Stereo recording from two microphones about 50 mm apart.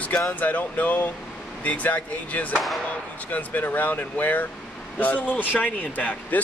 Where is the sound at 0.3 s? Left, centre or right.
Left.